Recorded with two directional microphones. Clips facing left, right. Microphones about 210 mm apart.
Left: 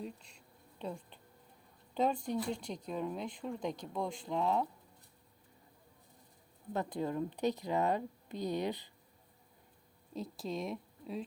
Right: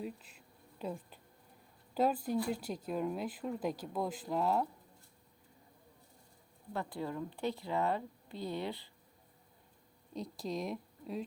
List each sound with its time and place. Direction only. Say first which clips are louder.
0.0 s speech: right 2 dB; 5° right (ahead or behind)
6.7 s speech: left 3 dB; 20° left (ahead or behind)
10.2 s speech: even; centre (ahead or behind)